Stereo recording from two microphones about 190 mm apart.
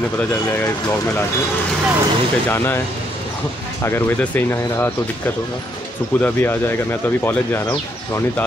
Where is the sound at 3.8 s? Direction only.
10° left (ahead or behind).